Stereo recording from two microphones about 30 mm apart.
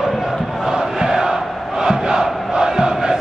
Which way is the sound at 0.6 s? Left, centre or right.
Right.